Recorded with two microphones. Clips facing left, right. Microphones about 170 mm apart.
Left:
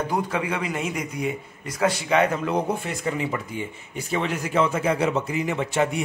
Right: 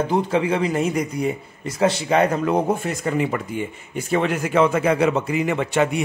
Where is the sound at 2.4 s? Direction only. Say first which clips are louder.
Right 4 dB; 50° right (ahead or behind).